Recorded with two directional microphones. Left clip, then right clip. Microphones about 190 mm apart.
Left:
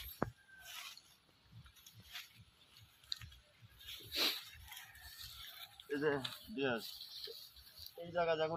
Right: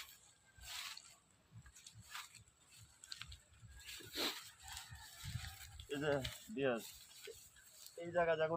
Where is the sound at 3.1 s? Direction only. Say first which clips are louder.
Left 5 dB; 20° right (ahead or behind).